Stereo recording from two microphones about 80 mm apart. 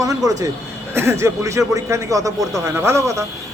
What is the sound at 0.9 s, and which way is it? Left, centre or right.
A man's voice, right.